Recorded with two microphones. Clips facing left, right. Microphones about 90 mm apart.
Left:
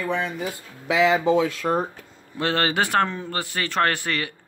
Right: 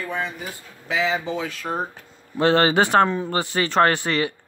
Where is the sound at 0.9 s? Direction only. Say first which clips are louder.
Left 5 dB; 75° left (ahead or behind).